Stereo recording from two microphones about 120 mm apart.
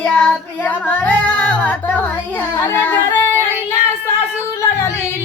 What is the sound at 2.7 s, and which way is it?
Singing, 15° left (ahead or behind).